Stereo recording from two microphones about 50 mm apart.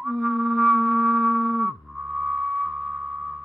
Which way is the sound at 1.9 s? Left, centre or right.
Centre.